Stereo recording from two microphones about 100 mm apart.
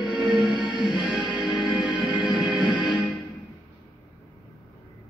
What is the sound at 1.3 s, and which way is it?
Music, 50° left (ahead or behind).